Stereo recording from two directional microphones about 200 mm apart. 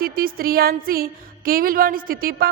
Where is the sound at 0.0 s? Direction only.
45° right (ahead or behind).